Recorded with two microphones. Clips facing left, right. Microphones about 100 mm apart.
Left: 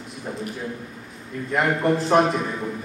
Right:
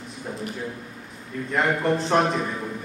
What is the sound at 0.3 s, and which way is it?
Speech, centre (ahead or behind).